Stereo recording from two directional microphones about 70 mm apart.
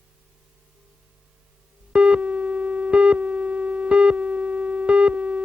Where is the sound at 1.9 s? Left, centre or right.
Centre.